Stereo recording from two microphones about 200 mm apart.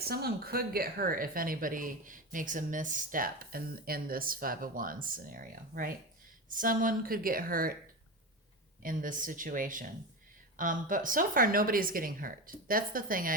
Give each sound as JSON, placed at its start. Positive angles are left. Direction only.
{"t": 0.1, "sound": "speech", "side_deg": -50}
{"t": 8.8, "sound": "speech", "side_deg": -45}